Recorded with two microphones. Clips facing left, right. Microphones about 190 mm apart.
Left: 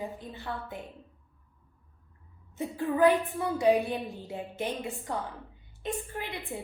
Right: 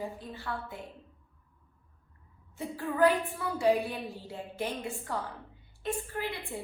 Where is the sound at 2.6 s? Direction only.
20° left (ahead or behind).